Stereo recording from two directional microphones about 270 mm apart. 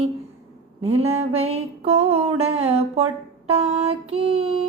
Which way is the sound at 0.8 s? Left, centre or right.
Right.